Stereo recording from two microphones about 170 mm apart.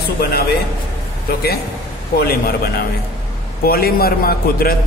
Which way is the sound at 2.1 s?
65° left (ahead or behind).